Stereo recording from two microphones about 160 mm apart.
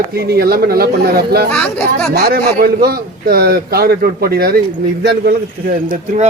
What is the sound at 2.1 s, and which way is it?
Speech, 70° right (ahead or behind).